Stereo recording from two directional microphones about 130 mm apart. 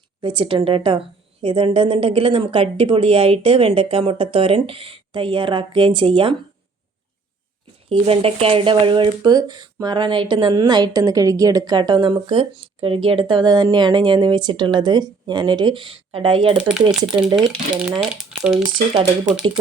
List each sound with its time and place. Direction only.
0.2 s a woman's voice: 40° right (ahead or behind)
7.9 s speech: 45° right (ahead or behind)
16.6 s speech: 5° right (ahead or behind)